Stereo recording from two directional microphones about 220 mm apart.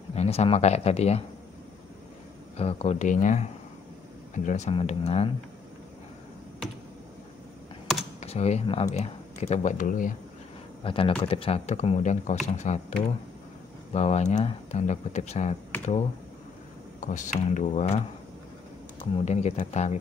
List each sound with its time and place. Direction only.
0.1 s speech: 30° left (ahead or behind)
2.5 s speech: 30° left (ahead or behind)
4.5 s speech: 30° left (ahead or behind)
8.2 s speech: 30° left (ahead or behind)
10.8 s speech: 25° left (ahead or behind)
13.9 s speech: 30° left (ahead or behind)
19.2 s speech: 30° left (ahead or behind)